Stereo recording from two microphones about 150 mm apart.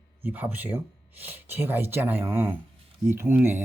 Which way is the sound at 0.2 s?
10° right (ahead or behind).